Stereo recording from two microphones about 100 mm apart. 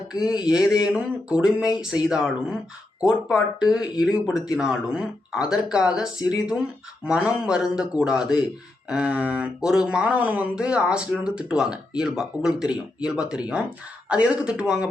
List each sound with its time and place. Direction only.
0.1 s speech: 10° right (ahead or behind)